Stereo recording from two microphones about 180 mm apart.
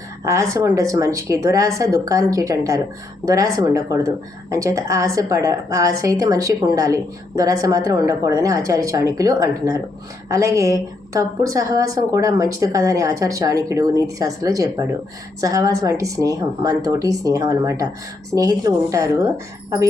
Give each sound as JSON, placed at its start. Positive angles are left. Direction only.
{"t": 0.5, "sound": "a woman's voice", "side_deg": -15}